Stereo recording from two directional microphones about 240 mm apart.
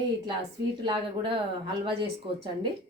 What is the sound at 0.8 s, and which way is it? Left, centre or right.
Speech, centre.